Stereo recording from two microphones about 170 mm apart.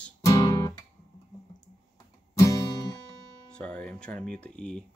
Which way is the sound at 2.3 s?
20° left (ahead or behind).